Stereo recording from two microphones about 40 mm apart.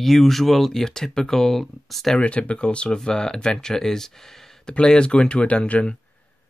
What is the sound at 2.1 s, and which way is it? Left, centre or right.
Speech, left.